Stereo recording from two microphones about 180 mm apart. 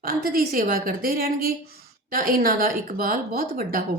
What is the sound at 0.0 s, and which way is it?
A woman's voice, 55° right (ahead or behind).